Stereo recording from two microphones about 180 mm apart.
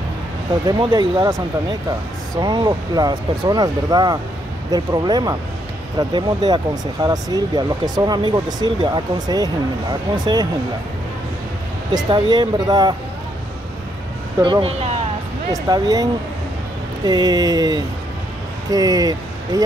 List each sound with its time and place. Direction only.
0.7 s speech: 25° right (ahead or behind)
11.9 s speech: 25° right (ahead or behind)
14.4 s speech: 30° right (ahead or behind)
15.5 s speech: 20° right (ahead or behind)